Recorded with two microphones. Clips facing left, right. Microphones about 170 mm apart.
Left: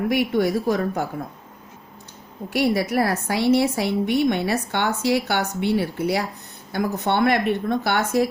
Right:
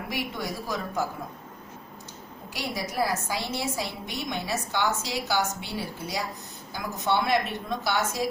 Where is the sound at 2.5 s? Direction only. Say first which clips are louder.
Left 13 dB; 65° left (ahead or behind).